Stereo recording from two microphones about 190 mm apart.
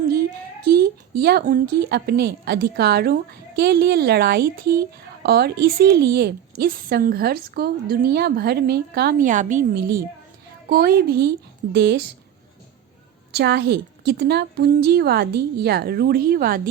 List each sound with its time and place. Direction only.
0.7 s a woman's voice: 55° right (ahead or behind)
13.3 s a woman's voice: 60° right (ahead or behind)